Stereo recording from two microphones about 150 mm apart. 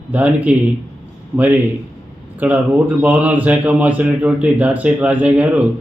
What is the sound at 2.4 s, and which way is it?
Speech, 10° right (ahead or behind).